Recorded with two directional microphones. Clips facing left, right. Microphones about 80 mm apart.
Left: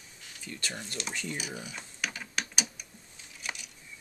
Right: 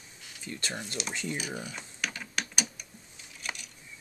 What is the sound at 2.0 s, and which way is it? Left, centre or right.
Typing, centre.